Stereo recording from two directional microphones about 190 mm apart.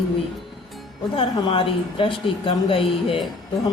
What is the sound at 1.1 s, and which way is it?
Speech, 30° left (ahead or behind).